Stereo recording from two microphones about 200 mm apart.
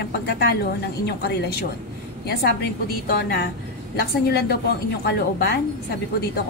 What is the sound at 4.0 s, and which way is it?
A woman's voice, 50° left (ahead or behind).